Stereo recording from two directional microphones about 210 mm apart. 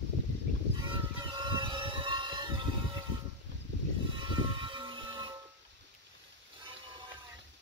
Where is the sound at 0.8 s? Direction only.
20° right (ahead or behind).